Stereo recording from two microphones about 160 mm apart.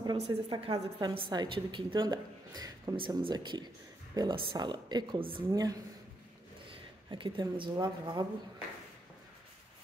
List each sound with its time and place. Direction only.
0.0 s a woman's voice: 30° right (ahead or behind)